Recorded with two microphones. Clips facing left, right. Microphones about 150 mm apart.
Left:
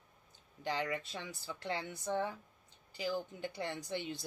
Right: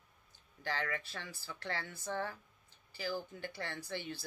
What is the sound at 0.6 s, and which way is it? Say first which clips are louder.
Speech: left 2 dB; 15° left (ahead or behind).